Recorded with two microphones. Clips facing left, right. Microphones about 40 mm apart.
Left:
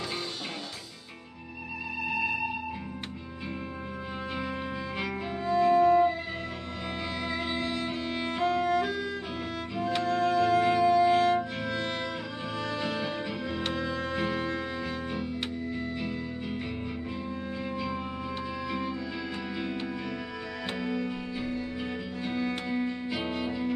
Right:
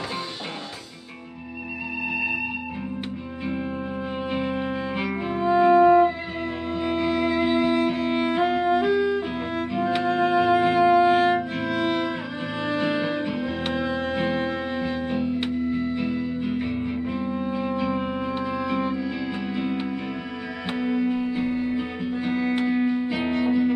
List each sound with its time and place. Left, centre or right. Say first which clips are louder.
4.3 s music: right 8 dB; right
11.6 s music: right 8 dB; right
16.0 s music: right 8 dB; centre
17.6 s music: right 7 dB; right